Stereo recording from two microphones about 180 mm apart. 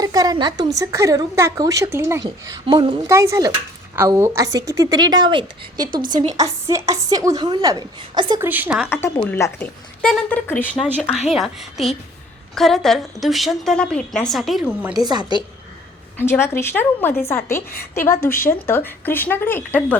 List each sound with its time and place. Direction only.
0.0 s a woman's voice: 20° right (ahead or behind)
2.6 s a woman's voice: 30° right (ahead or behind)
3.1 s a woman's voice: 15° right (ahead or behind)
8.4 s a woman's voice: 10° right (ahead or behind)
8.9 s speech: 15° left (ahead or behind)
11.3 s a woman's voice: centre (ahead or behind)
16.1 s speech: 15° left (ahead or behind)